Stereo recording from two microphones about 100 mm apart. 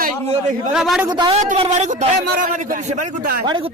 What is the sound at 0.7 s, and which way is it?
Speech, 5° right (ahead or behind).